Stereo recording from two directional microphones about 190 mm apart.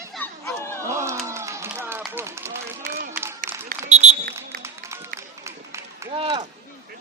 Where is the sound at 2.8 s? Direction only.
45° right (ahead or behind).